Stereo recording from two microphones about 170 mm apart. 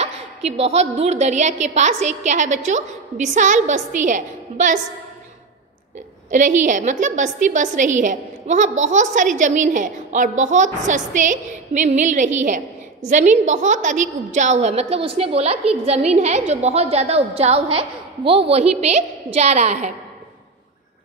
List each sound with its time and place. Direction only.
0.0 s a woman's voice: 40° right (ahead or behind)
6.3 s a woman's voice: 45° right (ahead or behind)